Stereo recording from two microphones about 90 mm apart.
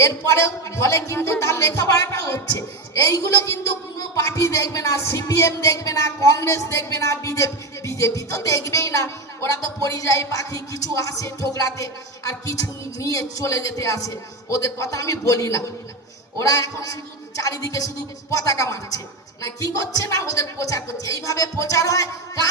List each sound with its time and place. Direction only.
0.0 s a woman's voice: 35° left (ahead or behind)